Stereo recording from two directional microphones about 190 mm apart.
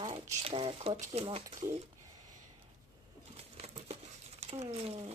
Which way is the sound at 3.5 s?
35° right (ahead or behind).